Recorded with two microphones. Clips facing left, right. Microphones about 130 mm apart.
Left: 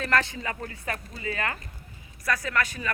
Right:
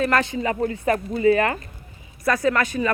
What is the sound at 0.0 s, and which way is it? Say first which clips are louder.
Speech: right 6 dB; 20° right (ahead or behind).